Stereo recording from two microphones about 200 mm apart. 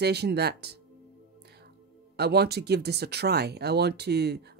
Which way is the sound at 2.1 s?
55° right (ahead or behind).